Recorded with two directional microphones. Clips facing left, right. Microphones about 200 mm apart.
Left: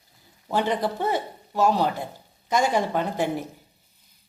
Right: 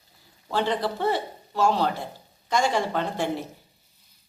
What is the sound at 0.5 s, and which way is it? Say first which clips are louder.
A woman's voice: left 1 dB; 15° left (ahead or behind).